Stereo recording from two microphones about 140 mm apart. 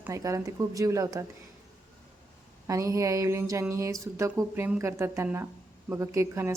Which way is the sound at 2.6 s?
25° right (ahead or behind).